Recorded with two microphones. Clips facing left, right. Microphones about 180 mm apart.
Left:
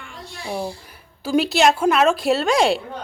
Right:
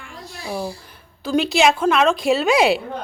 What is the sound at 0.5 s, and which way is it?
Speech, 20° left (ahead or behind).